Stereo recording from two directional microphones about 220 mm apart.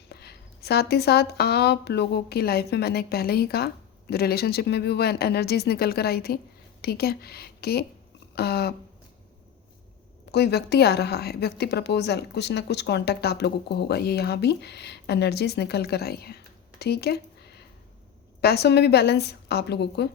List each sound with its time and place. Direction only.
0.1 s a woman's voice: 45° left (ahead or behind)
10.3 s a woman's voice: 50° left (ahead or behind)
18.3 s a woman's voice: 45° left (ahead or behind)